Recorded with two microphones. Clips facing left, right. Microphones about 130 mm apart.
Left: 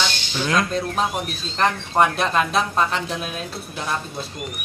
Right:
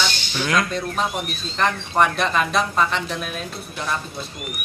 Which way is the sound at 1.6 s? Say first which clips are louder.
Left 1 dB; 5° left (ahead or behind).